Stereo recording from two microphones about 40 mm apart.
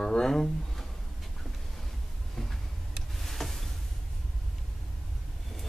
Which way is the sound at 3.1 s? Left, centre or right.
Centre.